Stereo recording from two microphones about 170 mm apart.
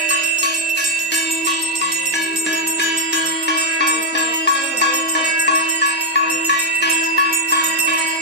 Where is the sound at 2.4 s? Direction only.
85° left.